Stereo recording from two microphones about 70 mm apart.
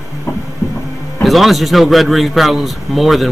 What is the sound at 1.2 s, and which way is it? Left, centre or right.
Speech, centre.